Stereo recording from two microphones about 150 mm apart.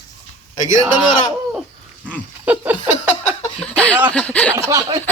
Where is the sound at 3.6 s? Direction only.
10° left (ahead or behind).